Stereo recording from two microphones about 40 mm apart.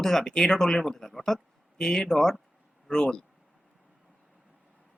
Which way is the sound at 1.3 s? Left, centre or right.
Centre.